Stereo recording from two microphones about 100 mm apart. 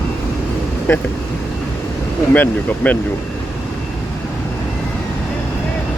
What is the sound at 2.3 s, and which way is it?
Speech, 15° left (ahead or behind).